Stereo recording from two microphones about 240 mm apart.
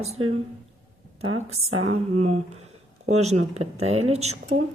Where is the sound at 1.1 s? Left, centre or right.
Right.